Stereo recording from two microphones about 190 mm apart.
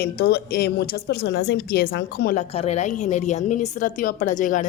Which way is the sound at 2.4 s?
30° left (ahead or behind).